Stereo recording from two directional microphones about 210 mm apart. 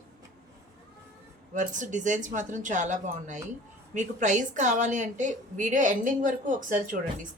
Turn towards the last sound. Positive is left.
turn(degrees=-40)  # may be behind; listen again after turning